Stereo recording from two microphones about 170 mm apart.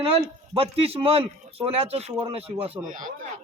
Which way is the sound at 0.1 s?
35° right (ahead or behind).